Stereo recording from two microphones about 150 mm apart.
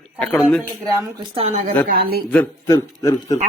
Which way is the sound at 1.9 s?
90° right.